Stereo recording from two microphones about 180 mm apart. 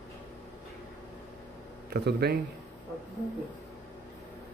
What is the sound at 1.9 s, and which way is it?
Speech, 60° right (ahead or behind).